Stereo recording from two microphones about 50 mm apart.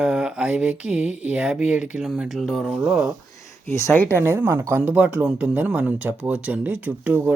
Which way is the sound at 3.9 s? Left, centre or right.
Left.